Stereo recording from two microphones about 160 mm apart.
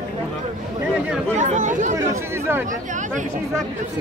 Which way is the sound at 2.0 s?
15° right (ahead or behind).